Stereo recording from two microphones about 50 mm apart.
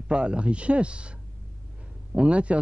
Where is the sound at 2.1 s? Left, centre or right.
Right.